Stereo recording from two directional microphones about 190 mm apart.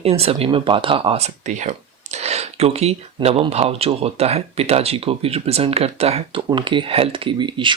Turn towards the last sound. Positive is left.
turn(degrees=-25)  # may be behind; listen again after turning